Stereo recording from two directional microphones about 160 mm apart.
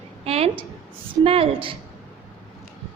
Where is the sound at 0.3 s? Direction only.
40° right (ahead or behind).